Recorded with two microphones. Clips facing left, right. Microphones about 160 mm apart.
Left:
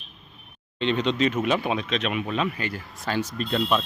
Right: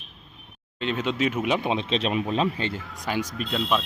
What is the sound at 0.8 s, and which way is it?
Speech, 5° right (ahead or behind).